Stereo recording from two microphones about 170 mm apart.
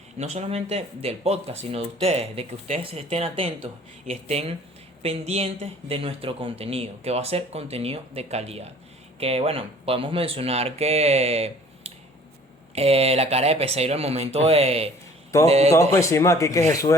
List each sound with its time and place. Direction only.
0.2 s speech: 40° right (ahead or behind)
15.7 s speech: 15° left (ahead or behind)